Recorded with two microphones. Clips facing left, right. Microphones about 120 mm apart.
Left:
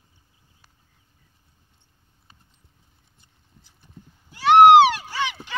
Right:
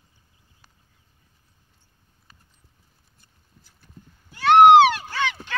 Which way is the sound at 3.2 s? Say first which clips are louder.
Left 1 dB; 15° left (ahead or behind).